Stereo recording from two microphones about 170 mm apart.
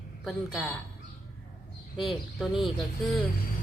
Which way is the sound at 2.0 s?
Centre (ahead or behind).